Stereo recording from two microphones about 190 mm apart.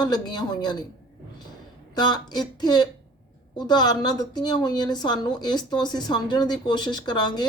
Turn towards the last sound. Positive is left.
turn(degrees=20)  # may be behind; listen again after turning